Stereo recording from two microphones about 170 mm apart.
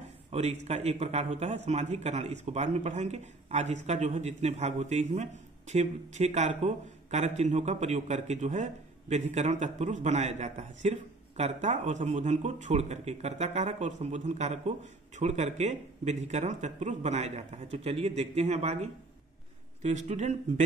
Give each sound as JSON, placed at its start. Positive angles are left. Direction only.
{"t": 0.3, "sound": "a man's voice", "side_deg": -40}